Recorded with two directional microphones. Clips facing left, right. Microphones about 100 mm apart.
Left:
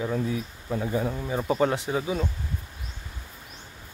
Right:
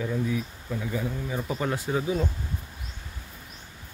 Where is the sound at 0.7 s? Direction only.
40° left (ahead or behind).